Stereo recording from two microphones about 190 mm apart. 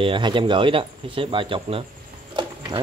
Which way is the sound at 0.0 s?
25° right (ahead or behind).